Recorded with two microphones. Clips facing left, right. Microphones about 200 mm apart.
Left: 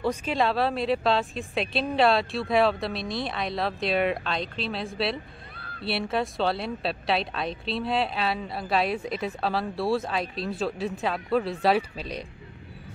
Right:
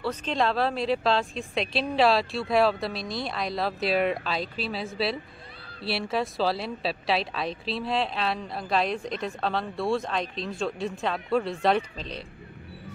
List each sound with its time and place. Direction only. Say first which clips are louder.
0.0 s speech: left 1 dB; 10° left (ahead or behind)